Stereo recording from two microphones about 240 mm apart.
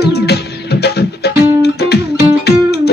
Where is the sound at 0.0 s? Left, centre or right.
Left.